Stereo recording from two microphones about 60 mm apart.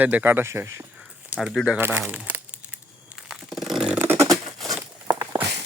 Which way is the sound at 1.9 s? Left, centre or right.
Right.